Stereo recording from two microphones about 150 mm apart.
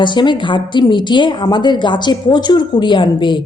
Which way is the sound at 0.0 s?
30° left (ahead or behind).